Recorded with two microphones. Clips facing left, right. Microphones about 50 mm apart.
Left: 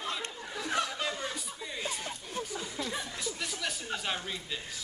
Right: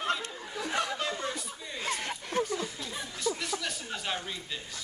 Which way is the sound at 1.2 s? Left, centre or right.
Centre.